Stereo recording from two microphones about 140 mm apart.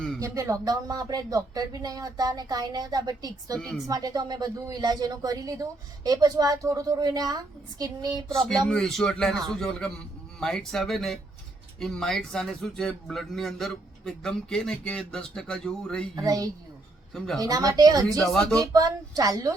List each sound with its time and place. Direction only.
0.2 s speech: 20° right (ahead or behind)
8.6 s a man's voice: 5° left (ahead or behind)
16.1 s speech: 25° right (ahead or behind)